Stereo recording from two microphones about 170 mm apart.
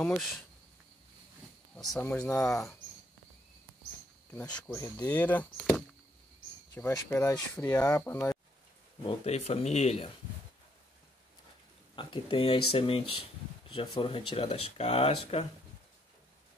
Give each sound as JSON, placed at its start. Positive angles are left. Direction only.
{"t": 0.0, "sound": "speech", "side_deg": 5}
{"t": 1.8, "sound": "speech", "side_deg": 0}
{"t": 4.5, "sound": "speech", "side_deg": 25}
{"t": 4.8, "sound": "speech", "side_deg": 10}
{"t": 9.0, "sound": "speech", "side_deg": 40}
{"t": 11.9, "sound": "speech", "side_deg": 30}